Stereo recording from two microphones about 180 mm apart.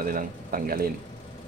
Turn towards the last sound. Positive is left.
turn(degrees=-55)  # may be behind; listen again after turning